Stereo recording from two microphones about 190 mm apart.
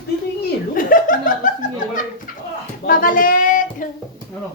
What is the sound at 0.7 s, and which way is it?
Speech, 45° left (ahead or behind).